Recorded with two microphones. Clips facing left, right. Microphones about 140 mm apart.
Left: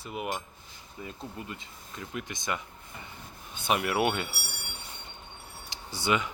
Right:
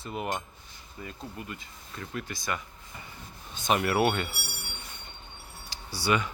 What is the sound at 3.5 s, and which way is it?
Speech, 10° left (ahead or behind).